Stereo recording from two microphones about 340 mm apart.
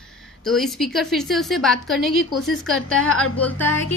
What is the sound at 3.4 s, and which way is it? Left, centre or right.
Speech, centre.